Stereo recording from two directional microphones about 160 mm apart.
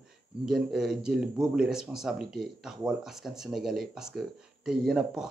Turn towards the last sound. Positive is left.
turn(degrees=-5)  # may be behind; listen again after turning